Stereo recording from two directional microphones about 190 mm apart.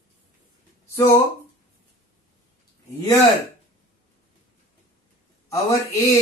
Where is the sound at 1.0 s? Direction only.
15° left (ahead or behind).